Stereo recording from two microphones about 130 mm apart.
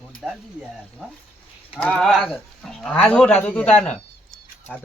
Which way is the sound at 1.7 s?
10° left (ahead or behind).